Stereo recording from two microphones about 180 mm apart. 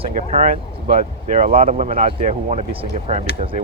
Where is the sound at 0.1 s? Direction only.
40° right (ahead or behind).